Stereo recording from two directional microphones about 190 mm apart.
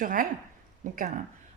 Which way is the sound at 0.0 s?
45° right (ahead or behind).